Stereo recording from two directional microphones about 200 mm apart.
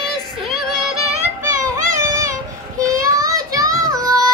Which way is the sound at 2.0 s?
15° right (ahead or behind).